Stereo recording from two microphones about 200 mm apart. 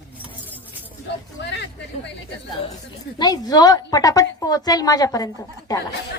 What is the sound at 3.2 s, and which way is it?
A woman's voice, 20° left (ahead or behind).